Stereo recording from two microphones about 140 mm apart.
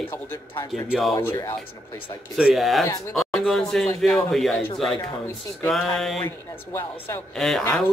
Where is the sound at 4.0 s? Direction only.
5° left (ahead or behind).